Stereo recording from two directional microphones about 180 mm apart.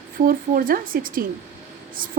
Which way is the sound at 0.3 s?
50° right (ahead or behind).